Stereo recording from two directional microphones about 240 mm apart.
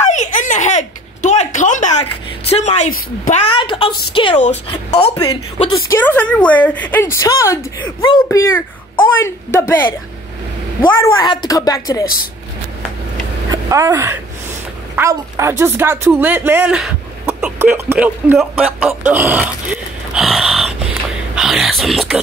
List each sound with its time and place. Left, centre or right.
0.0 s a sound: left
2.5 s a woman's voice: left; by 9.8 s centre
11.0 s a woman's voice: centre
13.5 s speech: centre
18.8 s a sound: centre
21.4 s speech: centre